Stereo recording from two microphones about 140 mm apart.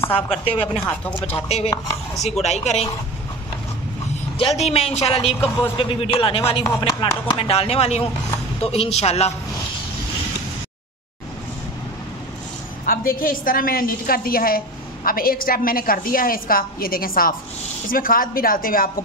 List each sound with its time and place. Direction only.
0.1 s speech: 40° left (ahead or behind)
4.4 s speech: 45° left (ahead or behind)
12.8 s a woman's voice: 90° left